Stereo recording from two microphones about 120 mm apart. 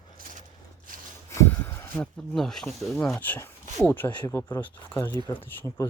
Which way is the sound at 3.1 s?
15° left (ahead or behind).